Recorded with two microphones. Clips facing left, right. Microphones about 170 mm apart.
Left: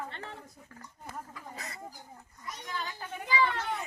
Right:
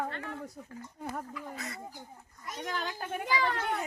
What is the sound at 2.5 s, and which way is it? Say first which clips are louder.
Speech: right 4 dB; 85° right.